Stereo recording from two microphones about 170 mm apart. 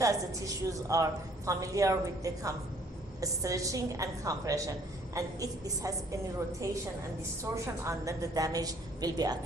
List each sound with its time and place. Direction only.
0.0 s a woman's voice: 20° right (ahead or behind)
7.5 s a woman's voice: 20° right (ahead or behind)